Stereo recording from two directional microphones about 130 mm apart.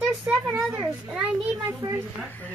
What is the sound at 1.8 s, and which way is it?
Speech, 25° right (ahead or behind).